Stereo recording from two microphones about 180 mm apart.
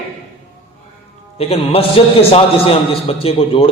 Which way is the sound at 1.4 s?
35° left (ahead or behind).